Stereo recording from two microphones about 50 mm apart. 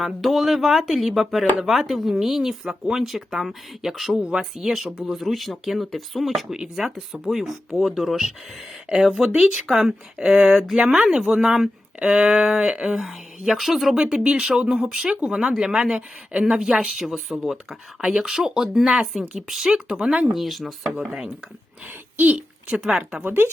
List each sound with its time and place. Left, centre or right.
0.0 s speech: centre
4.1 s speech: centre
4.5 s speech: centre
10.8 s speech: right
11.9 s speech: centre
12.9 s speech: centre
14.0 s speech: centre
17.0 s speech: centre
18.0 s speech: centre
20.3 s speech: centre
21.8 s speech: right
22.7 s speech: centre
23.2 s speech: right